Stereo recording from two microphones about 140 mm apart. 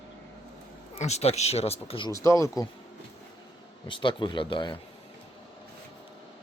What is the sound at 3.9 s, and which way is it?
Speech, 35° left (ahead or behind).